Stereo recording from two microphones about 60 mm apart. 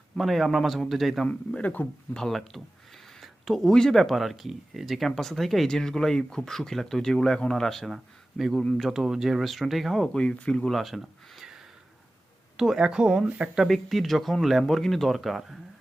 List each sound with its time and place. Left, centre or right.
0.2 s speech: centre
1.3 s speech: left
2.1 s speech: centre
10.1 s speech: centre
10.7 s a sound: centre
12.5 s speech: centre
13.7 s speech: centre